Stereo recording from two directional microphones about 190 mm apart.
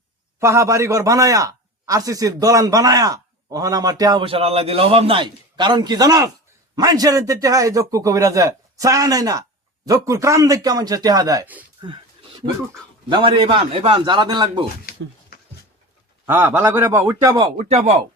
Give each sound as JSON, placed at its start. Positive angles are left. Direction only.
{"t": 0.3, "sound": "a man's voice", "side_deg": -15}
{"t": 13.1, "sound": "a man's voice", "side_deg": -25}
{"t": 16.2, "sound": "a man's voice", "side_deg": -10}
{"t": 17.6, "sound": "speech", "side_deg": -35}